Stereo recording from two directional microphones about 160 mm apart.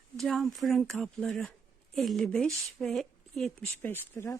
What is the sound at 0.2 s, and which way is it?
Speech, centre (ahead or behind).